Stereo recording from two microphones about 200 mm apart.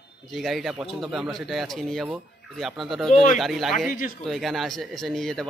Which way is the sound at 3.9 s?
45° left (ahead or behind).